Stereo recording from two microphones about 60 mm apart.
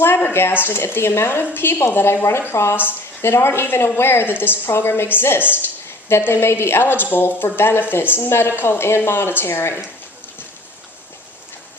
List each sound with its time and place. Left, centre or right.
0.0 s a woman's voice: left